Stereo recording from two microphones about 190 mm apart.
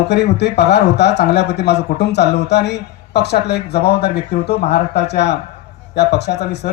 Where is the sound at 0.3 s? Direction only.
60° left (ahead or behind).